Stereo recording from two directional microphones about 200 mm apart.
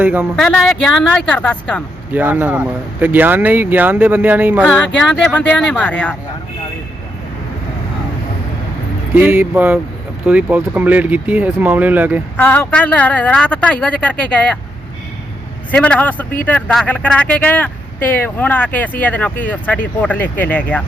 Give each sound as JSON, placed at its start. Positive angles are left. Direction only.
{"t": 0.0, "sound": "speech", "side_deg": -10}
{"t": 0.3, "sound": "speech", "side_deg": 5}
{"t": 2.1, "sound": "speech", "side_deg": -5}
{"t": 4.9, "sound": "speech", "side_deg": 5}
{"t": 9.1, "sound": "speech", "side_deg": -10}
{"t": 12.4, "sound": "speech", "side_deg": 10}
{"t": 15.7, "sound": "speech", "side_deg": 5}